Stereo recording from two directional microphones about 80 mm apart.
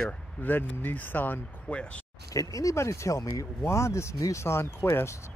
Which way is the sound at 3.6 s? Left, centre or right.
Left.